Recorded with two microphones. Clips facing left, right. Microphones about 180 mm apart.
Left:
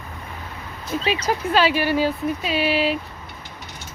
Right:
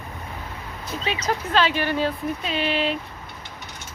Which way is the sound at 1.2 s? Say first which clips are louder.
Left 1 dB; 10° left (ahead or behind).